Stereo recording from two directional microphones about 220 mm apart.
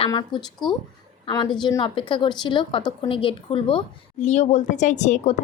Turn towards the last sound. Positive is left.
turn(degrees=30)  # may be behind; listen again after turning